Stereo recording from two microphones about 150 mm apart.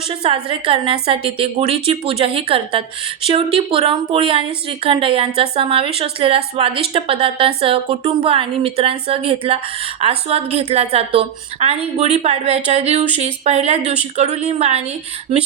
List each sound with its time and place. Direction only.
0.1 s a woman's voice: 40° right (ahead or behind)